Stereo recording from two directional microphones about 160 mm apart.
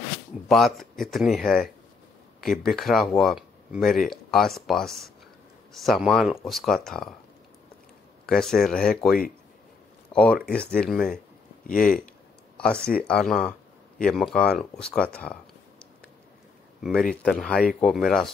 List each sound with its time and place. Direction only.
0.5 s speech: centre (ahead or behind)
8.3 s speech: centre (ahead or behind)
10.1 s speech: 5° left (ahead or behind)
11.6 s speech: 55° left (ahead or behind)
12.5 s speech: 5° left (ahead or behind)
16.8 s speech: centre (ahead or behind)